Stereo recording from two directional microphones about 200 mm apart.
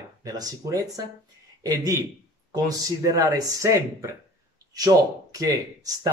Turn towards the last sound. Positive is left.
turn(degrees=-20)  # may be behind; listen again after turning